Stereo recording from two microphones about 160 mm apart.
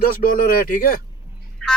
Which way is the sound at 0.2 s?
60° left (ahead or behind).